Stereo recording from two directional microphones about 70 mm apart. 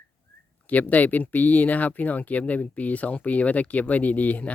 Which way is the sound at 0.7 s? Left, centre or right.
Left.